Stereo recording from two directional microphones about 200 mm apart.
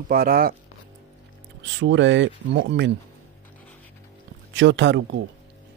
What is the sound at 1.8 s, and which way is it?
Speech, 65° right (ahead or behind).